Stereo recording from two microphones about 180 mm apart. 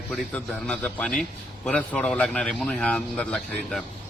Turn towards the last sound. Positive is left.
turn(degrees=5)  # may be behind; listen again after turning